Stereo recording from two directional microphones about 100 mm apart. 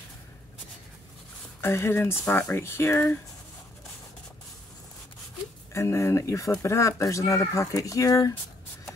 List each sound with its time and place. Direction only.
1.6 s speech: 25° left (ahead or behind)
5.7 s speech: 30° left (ahead or behind)